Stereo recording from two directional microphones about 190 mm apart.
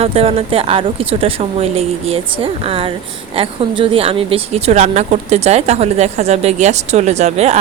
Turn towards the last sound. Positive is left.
turn(degrees=-35)  # may be behind; listen again after turning